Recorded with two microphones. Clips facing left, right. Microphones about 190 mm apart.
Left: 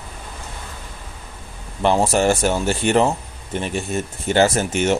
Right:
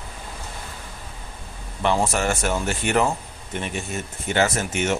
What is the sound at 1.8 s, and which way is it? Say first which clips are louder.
Speech: left 5 dB; 35° left (ahead or behind).